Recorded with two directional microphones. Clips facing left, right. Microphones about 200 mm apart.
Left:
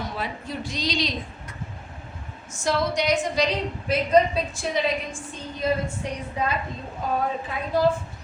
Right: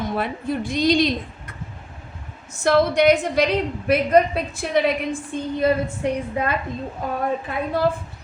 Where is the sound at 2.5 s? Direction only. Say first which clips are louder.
Right 7 dB; 60° right (ahead or behind).